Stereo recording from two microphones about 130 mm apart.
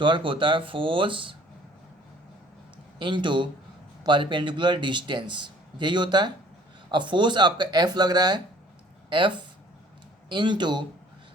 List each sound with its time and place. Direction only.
0.0 s speech: 40° right (ahead or behind)
3.0 s speech: 40° right (ahead or behind)